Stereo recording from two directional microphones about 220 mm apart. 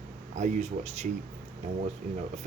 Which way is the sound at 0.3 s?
30° right (ahead or behind).